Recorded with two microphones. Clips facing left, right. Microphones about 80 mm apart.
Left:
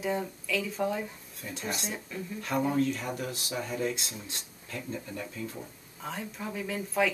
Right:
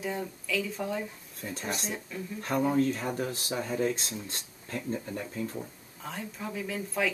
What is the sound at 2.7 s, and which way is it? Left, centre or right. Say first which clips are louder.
Speech: right 2 dB; right.